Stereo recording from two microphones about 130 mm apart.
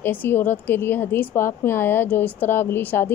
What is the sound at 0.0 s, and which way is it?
A woman's voice, 15° left (ahead or behind).